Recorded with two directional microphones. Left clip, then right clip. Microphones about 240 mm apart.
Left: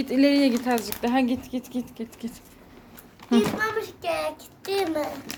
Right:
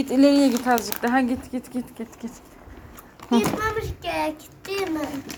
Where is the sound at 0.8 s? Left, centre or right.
Centre.